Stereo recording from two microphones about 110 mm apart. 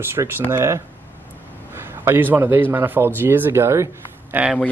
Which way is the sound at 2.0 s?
20° right (ahead or behind).